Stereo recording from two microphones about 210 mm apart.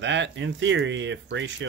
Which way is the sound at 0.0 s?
60° right (ahead or behind).